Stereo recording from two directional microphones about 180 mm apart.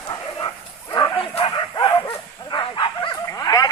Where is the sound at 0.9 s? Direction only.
25° left (ahead or behind).